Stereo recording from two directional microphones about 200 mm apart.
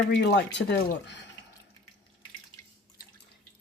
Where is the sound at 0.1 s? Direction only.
60° left (ahead or behind).